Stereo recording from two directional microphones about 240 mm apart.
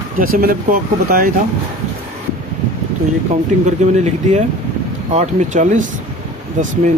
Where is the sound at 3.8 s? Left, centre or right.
Right.